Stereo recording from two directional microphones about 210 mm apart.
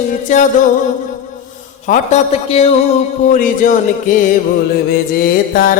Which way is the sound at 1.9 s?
35° left (ahead or behind).